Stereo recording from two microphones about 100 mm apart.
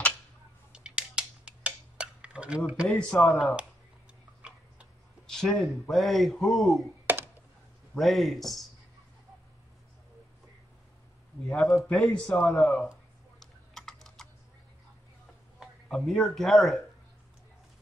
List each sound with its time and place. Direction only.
0.7 s a sound: 10° right (ahead or behind)
2.9 s a man's voice: 5° left (ahead or behind)
4.4 s tick-tock: 10° right (ahead or behind)
5.2 s a man's voice: 5° left (ahead or behind)
7.1 s computer keyboard: 20° right (ahead or behind)
8.0 s a man's voice: centre (ahead or behind)
11.4 s a man's voice: 5° left (ahead or behind)
13.4 s typing: 5° left (ahead or behind)
15.6 s speech: 5° left (ahead or behind)